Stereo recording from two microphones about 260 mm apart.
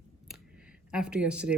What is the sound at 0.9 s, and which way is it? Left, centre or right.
Speech, centre.